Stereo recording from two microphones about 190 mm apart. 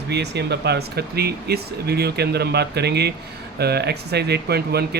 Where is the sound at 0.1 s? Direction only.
60° right (ahead or behind).